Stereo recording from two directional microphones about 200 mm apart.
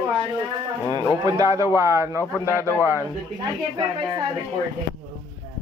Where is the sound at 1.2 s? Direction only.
20° right (ahead or behind).